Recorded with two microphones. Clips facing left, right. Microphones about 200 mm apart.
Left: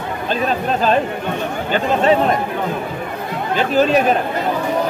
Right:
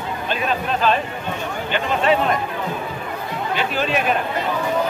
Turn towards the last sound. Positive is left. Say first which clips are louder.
# left 7 dB
turn(degrees=40)  # may be behind; listen again after turning